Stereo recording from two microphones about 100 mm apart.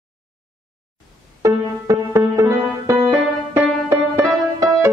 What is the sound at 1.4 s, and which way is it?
Music, 30° right (ahead or behind).